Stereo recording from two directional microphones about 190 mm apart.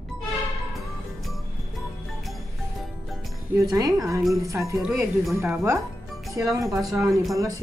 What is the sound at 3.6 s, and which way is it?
Speech, 20° right (ahead or behind).